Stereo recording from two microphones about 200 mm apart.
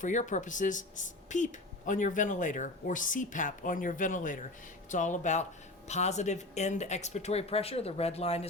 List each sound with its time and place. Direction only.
0.0 s speech: 40° left (ahead or behind)